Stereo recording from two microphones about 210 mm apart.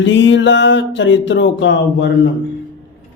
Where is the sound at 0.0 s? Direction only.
60° left (ahead or behind).